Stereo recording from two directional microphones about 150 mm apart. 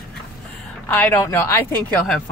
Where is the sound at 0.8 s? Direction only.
15° left (ahead or behind).